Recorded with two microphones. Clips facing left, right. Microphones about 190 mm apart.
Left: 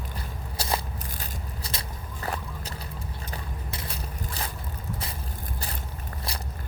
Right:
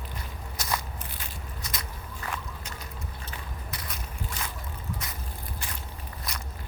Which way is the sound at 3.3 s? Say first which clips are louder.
Left 4 dB; 30° left (ahead or behind).